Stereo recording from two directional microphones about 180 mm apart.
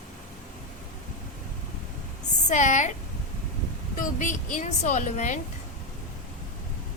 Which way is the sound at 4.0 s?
45° left (ahead or behind).